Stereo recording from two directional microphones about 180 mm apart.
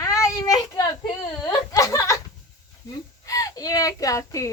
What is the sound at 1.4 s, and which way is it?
Speech, 20° left (ahead or behind).